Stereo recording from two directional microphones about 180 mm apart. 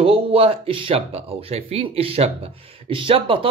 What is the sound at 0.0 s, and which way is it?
Speech, 30° right (ahead or behind).